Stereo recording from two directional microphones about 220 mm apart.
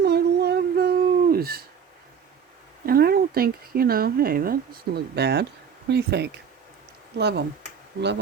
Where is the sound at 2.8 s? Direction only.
45° right (ahead or behind).